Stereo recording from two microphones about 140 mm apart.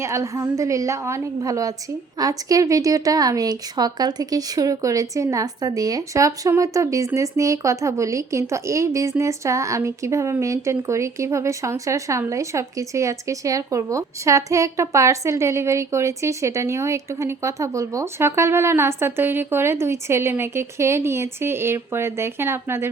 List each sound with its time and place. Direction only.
0.0 s speech: 25° right (ahead or behind)